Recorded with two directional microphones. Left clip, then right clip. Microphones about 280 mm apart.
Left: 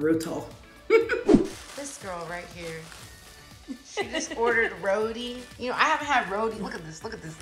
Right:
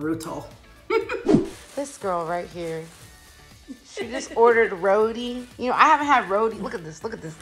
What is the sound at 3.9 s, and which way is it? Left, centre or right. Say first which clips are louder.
A woman's voice: right 4 dB; centre.